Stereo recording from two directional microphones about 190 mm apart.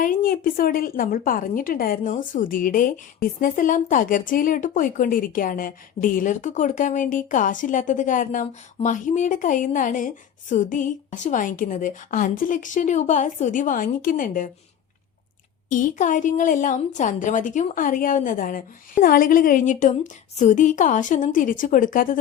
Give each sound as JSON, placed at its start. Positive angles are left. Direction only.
{"t": 0.0, "sound": "speech", "side_deg": 50}
{"t": 15.7, "sound": "speech", "side_deg": 40}